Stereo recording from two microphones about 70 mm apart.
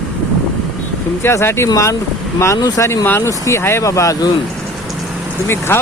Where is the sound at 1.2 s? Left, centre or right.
Left.